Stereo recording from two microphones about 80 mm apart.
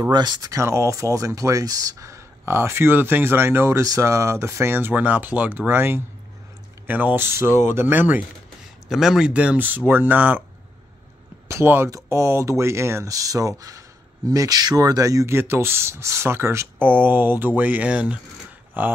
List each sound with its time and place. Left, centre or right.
0.1 s speech: right
0.5 s speech: right
8.8 s speech: centre; by 10.4 s right
11.4 s speech: right